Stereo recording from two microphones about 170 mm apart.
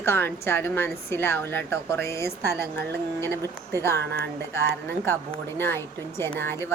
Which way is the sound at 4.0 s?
85° right.